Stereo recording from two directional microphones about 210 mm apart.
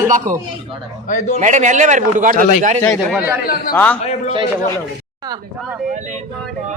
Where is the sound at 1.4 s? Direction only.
35° right (ahead or behind).